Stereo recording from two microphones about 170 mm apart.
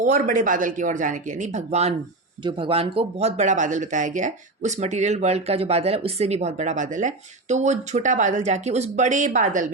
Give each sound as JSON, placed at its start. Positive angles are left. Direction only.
{"t": 0.0, "sound": "speech", "side_deg": -50}
{"t": 2.4, "sound": "speech", "side_deg": -30}